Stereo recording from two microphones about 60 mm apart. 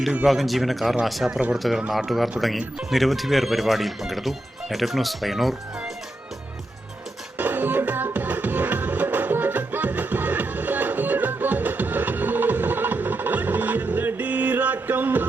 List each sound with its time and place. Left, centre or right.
0.3 s speech: centre
1.3 s speech: right
1.5 s speech: centre
7.3 s music: right